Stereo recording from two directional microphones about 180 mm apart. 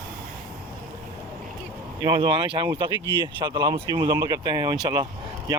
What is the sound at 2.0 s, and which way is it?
Speech, 20° right (ahead or behind).